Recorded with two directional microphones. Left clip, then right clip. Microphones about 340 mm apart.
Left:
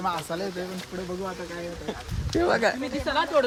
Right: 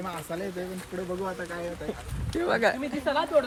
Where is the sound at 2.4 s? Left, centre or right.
Centre.